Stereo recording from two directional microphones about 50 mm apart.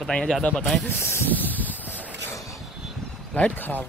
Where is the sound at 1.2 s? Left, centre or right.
Left.